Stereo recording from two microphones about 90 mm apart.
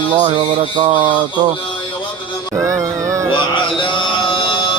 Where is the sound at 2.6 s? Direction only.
35° right (ahead or behind).